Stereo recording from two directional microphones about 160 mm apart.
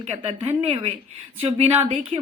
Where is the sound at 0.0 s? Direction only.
40° right (ahead or behind).